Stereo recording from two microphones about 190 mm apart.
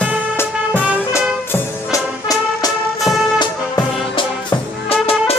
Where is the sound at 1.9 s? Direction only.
20° left (ahead or behind).